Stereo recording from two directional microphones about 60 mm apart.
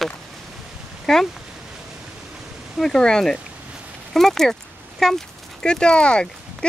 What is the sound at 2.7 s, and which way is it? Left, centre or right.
Speech, centre.